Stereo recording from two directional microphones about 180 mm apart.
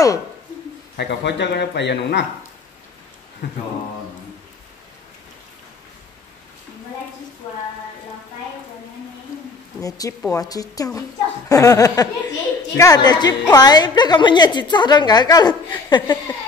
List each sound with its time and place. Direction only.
0.9 s speech: 70° left (ahead or behind)
9.8 s a woman's voice: 20° left (ahead or behind)